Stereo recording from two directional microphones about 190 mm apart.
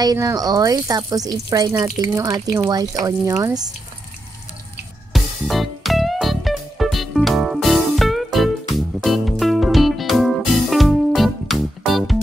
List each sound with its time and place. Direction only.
0.0 s speech: 20° right (ahead or behind)
5.1 s music: centre (ahead or behind)